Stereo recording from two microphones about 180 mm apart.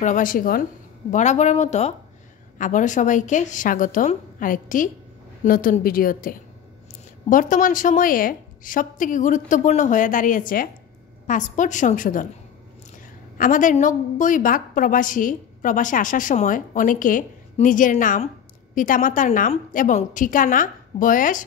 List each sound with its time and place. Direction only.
0.0 s a woman's voice: 45° left (ahead or behind)
1.1 s a woman's voice: 40° left (ahead or behind)
13.4 s a woman's voice: 45° left (ahead or behind)